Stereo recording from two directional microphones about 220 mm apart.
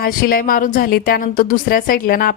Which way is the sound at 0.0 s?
45° left (ahead or behind).